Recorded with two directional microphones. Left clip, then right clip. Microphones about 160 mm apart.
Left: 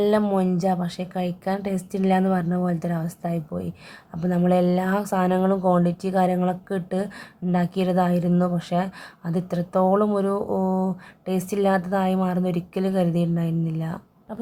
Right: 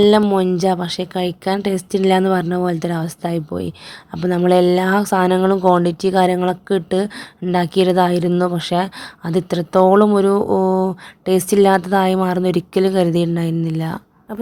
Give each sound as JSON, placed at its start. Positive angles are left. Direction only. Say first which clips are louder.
{"t": 0.0, "sound": "a woman's voice", "louder": "right 8 dB", "side_deg": -25}